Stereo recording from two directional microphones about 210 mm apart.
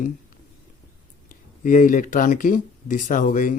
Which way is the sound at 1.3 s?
40° left (ahead or behind).